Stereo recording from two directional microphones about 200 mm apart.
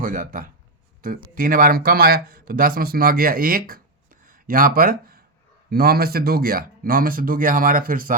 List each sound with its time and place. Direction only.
0.0 s speech: 40° right (ahead or behind)